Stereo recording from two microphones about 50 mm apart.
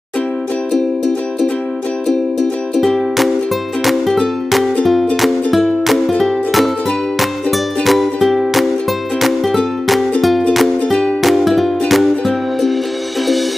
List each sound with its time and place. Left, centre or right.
0.7 s music: centre
2.7 s music: centre